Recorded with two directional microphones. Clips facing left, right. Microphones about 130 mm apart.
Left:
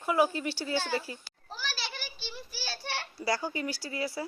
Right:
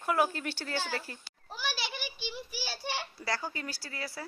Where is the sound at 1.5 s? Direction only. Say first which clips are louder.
Right 2 dB; 15° right (ahead or behind).